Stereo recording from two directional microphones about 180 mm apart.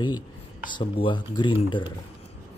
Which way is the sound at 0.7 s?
25° left (ahead or behind).